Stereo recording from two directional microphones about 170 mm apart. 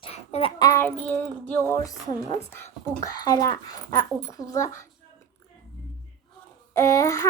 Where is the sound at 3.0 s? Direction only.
25° left (ahead or behind).